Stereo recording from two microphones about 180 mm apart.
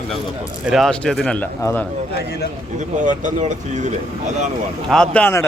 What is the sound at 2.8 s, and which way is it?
Speech, 45° right (ahead or behind).